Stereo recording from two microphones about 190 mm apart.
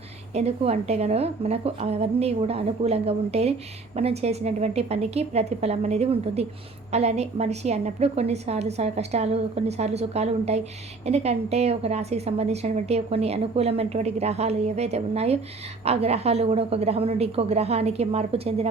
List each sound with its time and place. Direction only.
0.3 s a woman's voice: 35° right (ahead or behind)